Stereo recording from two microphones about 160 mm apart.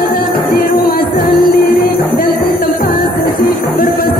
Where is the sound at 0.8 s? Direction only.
65° left (ahead or behind).